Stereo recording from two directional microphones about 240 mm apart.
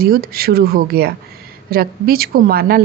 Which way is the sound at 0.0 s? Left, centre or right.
Right.